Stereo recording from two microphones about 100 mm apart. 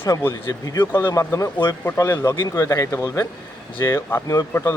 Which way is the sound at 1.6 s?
20° left (ahead or behind).